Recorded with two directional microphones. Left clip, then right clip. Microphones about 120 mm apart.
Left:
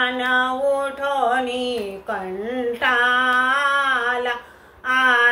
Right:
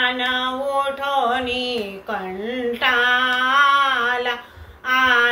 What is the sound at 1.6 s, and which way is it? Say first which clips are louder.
Female singing: even; 40° left (ahead or behind).